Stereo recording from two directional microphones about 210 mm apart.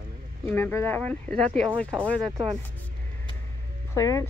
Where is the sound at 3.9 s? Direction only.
15° left (ahead or behind).